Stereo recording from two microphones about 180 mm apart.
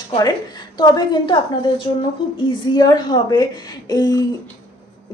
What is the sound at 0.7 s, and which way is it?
A woman's voice, 25° left (ahead or behind).